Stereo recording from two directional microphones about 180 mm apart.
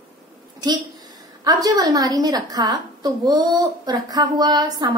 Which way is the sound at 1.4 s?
20° right (ahead or behind).